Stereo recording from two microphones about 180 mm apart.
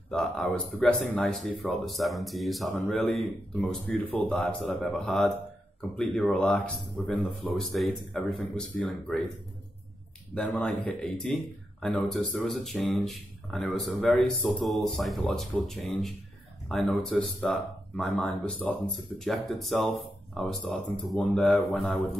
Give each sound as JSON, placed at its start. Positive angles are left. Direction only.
{"t": 0.1, "sound": "speech", "side_deg": 5}
{"t": 10.3, "sound": "speech", "side_deg": 5}